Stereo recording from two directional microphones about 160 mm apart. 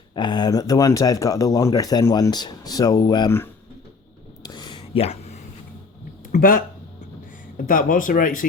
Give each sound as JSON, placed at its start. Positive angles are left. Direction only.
{"t": 0.2, "sound": "speech", "side_deg": 30}
{"t": 4.4, "sound": "a sound", "side_deg": 30}
{"t": 6.3, "sound": "speech", "side_deg": 55}